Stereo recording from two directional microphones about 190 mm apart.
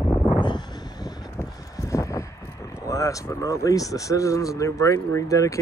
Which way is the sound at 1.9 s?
15° left (ahead or behind).